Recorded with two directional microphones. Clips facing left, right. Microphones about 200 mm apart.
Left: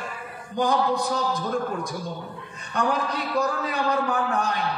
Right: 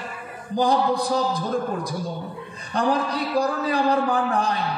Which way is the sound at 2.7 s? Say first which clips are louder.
Right 3 dB; 35° right (ahead or behind).